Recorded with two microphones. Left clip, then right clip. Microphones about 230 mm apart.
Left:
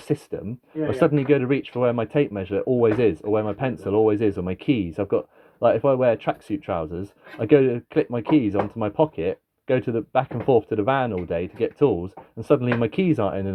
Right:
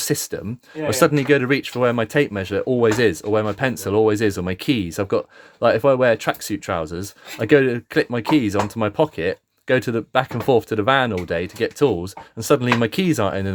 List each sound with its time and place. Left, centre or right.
0.0 s speech: right